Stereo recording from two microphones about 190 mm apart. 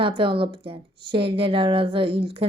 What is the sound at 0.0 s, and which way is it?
A woman's voice, 25° right (ahead or behind).